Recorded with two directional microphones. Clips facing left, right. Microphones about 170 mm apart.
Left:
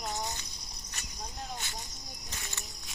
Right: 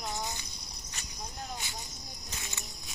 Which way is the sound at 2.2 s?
15° right (ahead or behind).